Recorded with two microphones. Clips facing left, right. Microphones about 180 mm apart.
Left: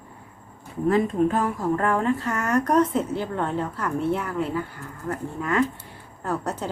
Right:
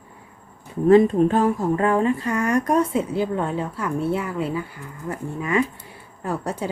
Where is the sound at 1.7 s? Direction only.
15° right (ahead or behind).